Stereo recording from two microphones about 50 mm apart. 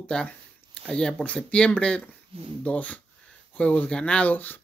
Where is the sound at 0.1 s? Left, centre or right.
Left.